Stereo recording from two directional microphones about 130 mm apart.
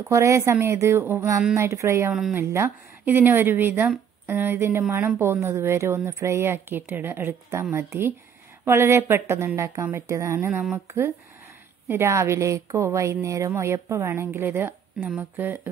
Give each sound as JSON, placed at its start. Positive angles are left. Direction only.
{"t": 0.0, "sound": "a woman's voice", "side_deg": -25}
{"t": 11.9, "sound": "a woman's voice", "side_deg": -20}